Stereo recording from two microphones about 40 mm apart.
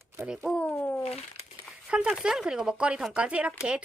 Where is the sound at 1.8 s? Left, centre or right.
Right.